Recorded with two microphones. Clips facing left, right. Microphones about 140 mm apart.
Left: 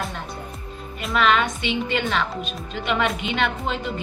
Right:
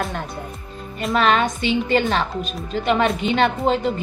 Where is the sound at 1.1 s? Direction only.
40° right (ahead or behind).